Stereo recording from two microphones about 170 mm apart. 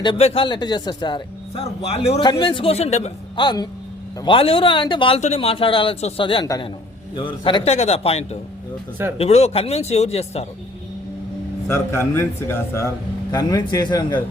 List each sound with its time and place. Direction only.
0.0 s speech: 30° left (ahead or behind)
3.4 s a man's voice: 25° left (ahead or behind)
11.7 s a man's voice: 15° left (ahead or behind)